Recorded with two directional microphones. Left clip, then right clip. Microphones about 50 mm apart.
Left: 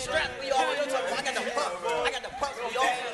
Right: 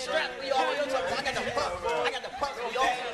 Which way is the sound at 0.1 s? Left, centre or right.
Centre.